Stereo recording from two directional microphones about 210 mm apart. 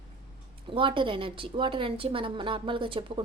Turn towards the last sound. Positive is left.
turn(degrees=-25)  # may be behind; listen again after turning